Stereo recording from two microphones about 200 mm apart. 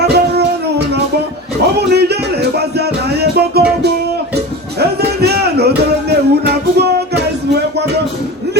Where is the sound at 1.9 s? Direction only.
55° right (ahead or behind).